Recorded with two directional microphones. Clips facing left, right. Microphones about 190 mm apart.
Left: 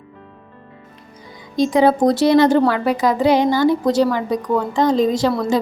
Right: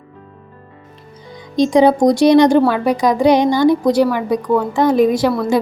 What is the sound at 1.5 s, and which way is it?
A woman's voice, 20° right (ahead or behind).